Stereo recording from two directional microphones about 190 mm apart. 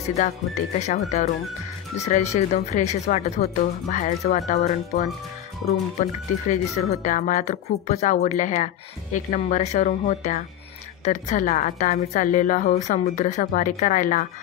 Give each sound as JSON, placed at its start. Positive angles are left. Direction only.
{"t": 0.7, "sound": "speech", "side_deg": 35}